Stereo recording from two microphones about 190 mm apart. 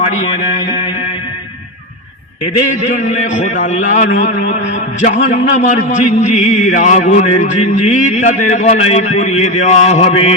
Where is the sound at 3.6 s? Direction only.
40° left (ahead or behind).